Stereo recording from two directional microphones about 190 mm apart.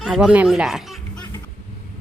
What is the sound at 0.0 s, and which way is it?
Speech, 5° right (ahead or behind).